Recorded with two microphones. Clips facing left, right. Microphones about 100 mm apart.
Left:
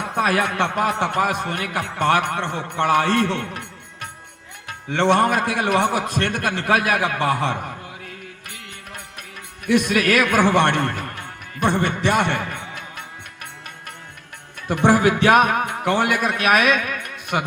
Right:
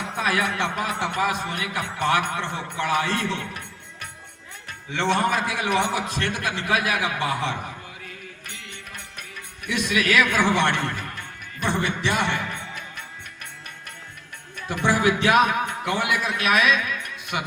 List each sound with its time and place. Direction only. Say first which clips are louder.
0.2 s a man's voice: left 4 dB; 55° left (ahead or behind)
4.9 s a man's voice: left 5 dB; 55° left (ahead or behind)
9.6 s a man's voice: left 6 dB; 55° left (ahead or behind)
14.7 s a man's voice: left 5 dB; 55° left (ahead or behind)